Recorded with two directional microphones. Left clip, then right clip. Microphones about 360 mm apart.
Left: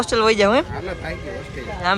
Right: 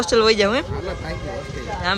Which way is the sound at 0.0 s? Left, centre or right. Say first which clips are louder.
Even; centre.